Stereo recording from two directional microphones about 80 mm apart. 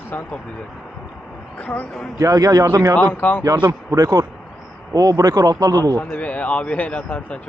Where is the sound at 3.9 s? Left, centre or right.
Right.